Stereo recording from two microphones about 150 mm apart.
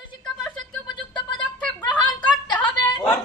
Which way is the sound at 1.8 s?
10° left (ahead or behind).